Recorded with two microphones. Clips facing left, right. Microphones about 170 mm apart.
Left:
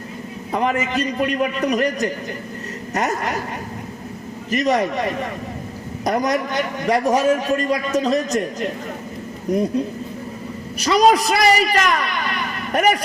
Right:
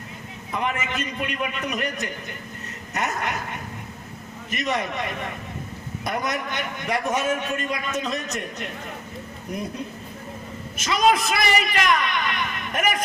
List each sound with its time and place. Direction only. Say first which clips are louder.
0.5 s a man's voice: left 7 dB; 35° left (ahead or behind)
4.5 s a man's voice: left 8 dB; 35° left (ahead or behind)